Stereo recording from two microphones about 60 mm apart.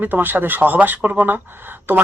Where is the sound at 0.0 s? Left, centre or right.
Right.